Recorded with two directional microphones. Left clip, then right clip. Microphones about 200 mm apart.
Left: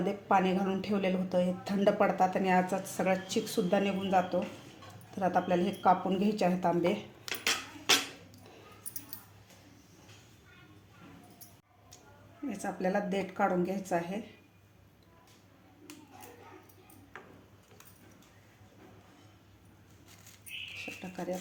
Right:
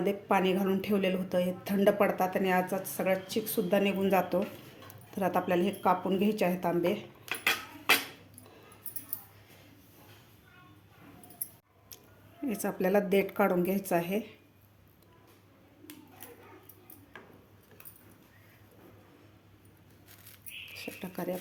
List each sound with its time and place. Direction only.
0.0 s a woman's voice: 15° right (ahead or behind)
4.1 s speech: 30° right (ahead or behind)
5.1 s a woman's voice: 20° right (ahead or behind)
8.4 s a sound: centre (ahead or behind)
12.5 s speech: 35° right (ahead or behind)
20.7 s a sound: 35° right (ahead or behind)